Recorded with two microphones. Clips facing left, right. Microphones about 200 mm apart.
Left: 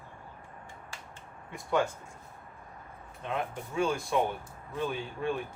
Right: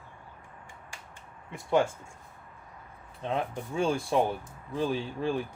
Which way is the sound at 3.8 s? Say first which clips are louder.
Right 2 dB; 30° right (ahead or behind).